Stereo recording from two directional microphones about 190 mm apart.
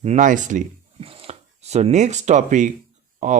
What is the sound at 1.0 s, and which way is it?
Speech, 30° right (ahead or behind).